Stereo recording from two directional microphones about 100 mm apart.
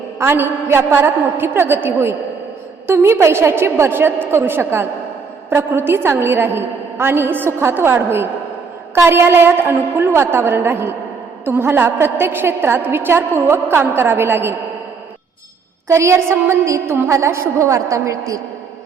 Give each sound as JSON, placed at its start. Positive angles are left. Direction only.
{"t": 0.2, "sound": "a woman's voice", "side_deg": -25}
{"t": 15.9, "sound": "a woman's voice", "side_deg": -30}